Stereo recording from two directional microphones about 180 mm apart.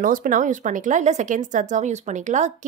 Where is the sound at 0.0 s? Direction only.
50° right (ahead or behind).